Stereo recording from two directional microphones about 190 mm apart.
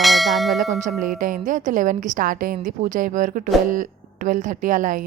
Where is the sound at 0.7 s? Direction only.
40° right (ahead or behind).